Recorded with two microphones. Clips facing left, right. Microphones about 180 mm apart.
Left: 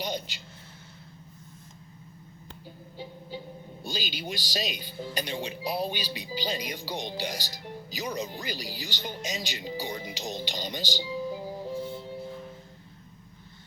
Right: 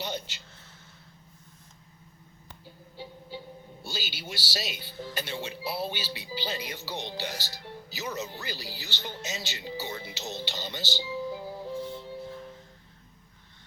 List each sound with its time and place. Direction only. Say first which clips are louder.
0.0 s a sound: left 2 dB; 15° left (ahead or behind)
3.0 s music: left 2 dB; 15° left (ahead or behind)
3.8 s speech: left 4 dB; 15° left (ahead or behind)